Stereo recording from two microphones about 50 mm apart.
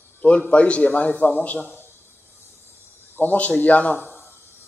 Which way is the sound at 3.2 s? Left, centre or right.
Left.